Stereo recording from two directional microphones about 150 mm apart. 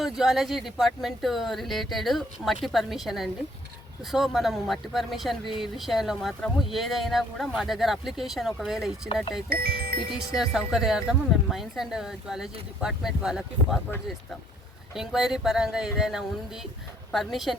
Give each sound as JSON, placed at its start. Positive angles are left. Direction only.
{"t": 0.0, "sound": "speech", "side_deg": 0}
{"t": 9.5, "sound": "speech", "side_deg": -90}
{"t": 10.3, "sound": "speech", "side_deg": -5}
{"t": 14.9, "sound": "speech", "side_deg": -5}